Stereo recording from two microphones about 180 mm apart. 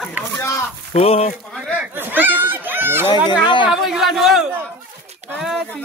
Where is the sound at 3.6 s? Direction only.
5° right (ahead or behind).